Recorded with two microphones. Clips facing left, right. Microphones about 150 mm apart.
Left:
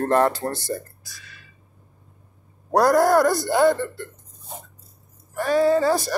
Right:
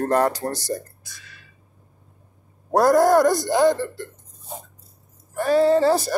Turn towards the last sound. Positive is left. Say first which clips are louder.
# right 2 dB
turn(degrees=-30)  # may be behind; listen again after turning